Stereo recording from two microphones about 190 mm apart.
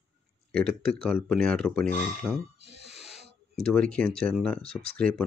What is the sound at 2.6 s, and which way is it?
Music, 65° right (ahead or behind).